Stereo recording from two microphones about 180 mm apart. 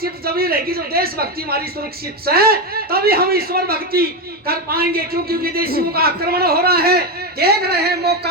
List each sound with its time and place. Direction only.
0.0 s a man's voice: 55° right (ahead or behind)